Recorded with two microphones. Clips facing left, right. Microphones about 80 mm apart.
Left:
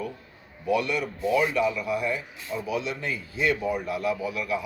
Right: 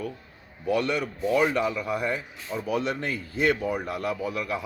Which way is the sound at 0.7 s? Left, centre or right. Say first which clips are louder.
Even; right.